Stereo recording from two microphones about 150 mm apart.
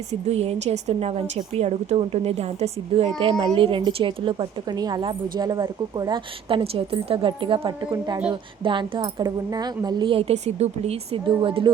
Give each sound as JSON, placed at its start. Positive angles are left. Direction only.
{"t": 0.1, "sound": "speech", "side_deg": -45}
{"t": 3.2, "sound": "a woman's voice", "side_deg": -30}